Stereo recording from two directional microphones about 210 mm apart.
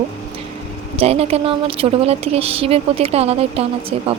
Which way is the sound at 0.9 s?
30° right (ahead or behind).